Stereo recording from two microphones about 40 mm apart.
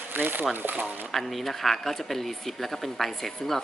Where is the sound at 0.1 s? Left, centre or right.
Right.